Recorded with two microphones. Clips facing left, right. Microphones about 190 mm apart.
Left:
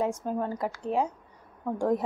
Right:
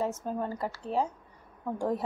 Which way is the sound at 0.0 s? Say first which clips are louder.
Left 3 dB; 10° left (ahead or behind).